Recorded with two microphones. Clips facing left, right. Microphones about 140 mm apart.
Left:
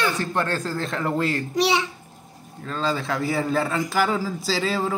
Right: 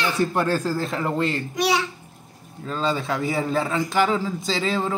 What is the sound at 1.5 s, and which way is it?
Speech, 25° left (ahead or behind).